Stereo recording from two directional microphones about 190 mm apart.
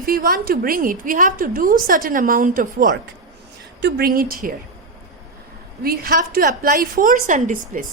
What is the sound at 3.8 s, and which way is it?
Speech, 55° right (ahead or behind).